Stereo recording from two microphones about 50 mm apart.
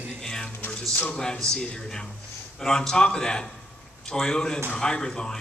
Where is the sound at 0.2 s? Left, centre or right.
Centre.